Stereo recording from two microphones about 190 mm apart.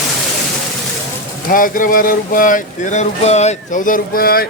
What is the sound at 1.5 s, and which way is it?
Speech, 45° left (ahead or behind).